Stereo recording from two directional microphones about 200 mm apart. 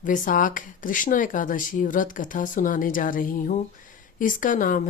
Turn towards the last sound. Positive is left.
turn(degrees=40)  # may be behind; listen again after turning